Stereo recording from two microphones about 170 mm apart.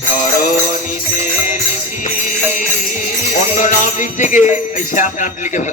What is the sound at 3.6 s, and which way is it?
Jingle bell, 50° left (ahead or behind).